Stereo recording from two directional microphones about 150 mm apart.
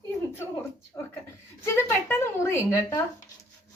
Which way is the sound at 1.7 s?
15° left (ahead or behind).